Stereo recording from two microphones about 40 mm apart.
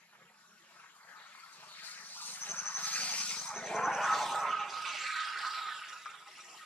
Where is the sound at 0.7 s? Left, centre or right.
Left.